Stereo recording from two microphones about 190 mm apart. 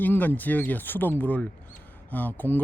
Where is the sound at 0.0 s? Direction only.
10° left (ahead or behind).